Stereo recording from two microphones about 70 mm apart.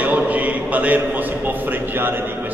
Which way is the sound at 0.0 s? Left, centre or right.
Right.